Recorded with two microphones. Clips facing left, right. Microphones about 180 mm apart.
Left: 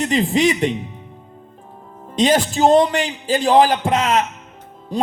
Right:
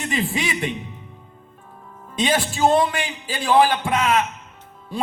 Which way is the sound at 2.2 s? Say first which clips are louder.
Left 5 dB; 40° left (ahead or behind).